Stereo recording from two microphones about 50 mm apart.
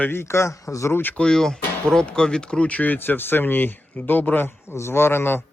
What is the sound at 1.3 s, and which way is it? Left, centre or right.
Speech, centre.